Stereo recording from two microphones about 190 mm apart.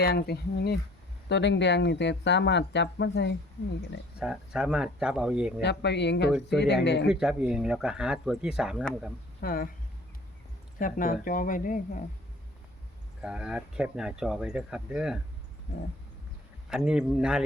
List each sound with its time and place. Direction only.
0.0 s speech: 55° left (ahead or behind)
1.3 s speech: 70° left (ahead or behind)
4.2 s speech: 5° right (ahead or behind)
5.6 s speech: 65° left (ahead or behind)
7.1 s speech: 5° right (ahead or behind)
9.4 s speech: 50° left (ahead or behind)
10.8 s speech: 45° left (ahead or behind)
13.2 s speech: 5° right (ahead or behind)
16.6 s speech: 5° right (ahead or behind)